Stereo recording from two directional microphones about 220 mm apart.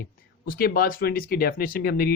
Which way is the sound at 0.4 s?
40° left (ahead or behind).